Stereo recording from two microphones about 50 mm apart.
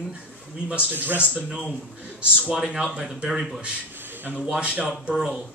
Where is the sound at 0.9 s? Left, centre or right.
Right.